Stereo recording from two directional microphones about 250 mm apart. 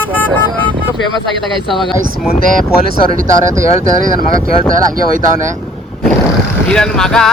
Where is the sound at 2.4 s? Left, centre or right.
Right.